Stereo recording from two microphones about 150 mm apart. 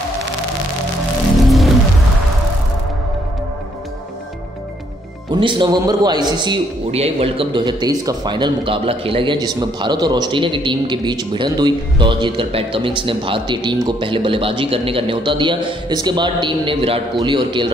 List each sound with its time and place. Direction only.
5.3 s a man's voice: 30° right (ahead or behind)
6.9 s a man's voice: 40° right (ahead or behind)